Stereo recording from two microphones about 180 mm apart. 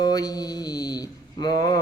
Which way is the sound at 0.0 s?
20° left (ahead or behind).